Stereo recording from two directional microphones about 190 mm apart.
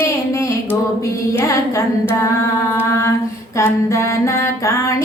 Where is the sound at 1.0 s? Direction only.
15° left (ahead or behind).